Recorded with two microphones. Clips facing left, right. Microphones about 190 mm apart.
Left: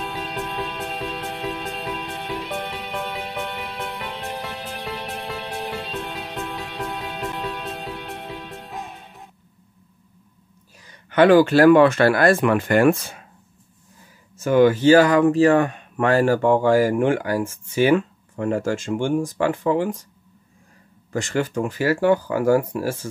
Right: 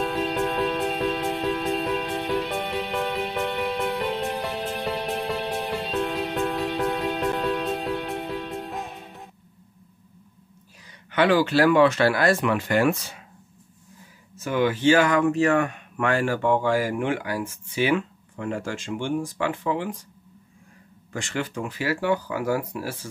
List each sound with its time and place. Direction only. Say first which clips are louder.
0.0 s music: right 5 dB; centre (ahead or behind)
11.1 s speech: left 7 dB; 50° left (ahead or behind)
14.3 s speech: left 8 dB; 45° left (ahead or behind)
21.1 s speech: left 6 dB; 40° left (ahead or behind)